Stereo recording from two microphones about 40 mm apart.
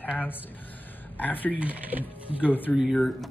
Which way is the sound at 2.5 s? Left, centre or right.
Left.